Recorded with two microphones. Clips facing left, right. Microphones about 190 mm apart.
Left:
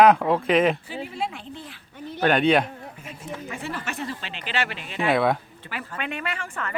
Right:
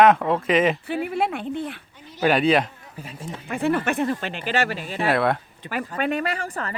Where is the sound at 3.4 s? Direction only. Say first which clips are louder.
Right 12 dB; 60° right (ahead or behind); by 5.1 s 40° right (ahead or behind).